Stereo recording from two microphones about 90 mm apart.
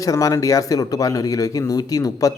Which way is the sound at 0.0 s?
40° left (ahead or behind).